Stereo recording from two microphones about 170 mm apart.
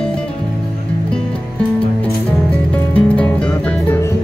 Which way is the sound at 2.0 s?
10° left (ahead or behind).